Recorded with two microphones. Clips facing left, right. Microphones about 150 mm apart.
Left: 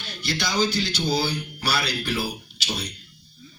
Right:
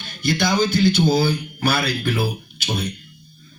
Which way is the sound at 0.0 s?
50° right (ahead or behind).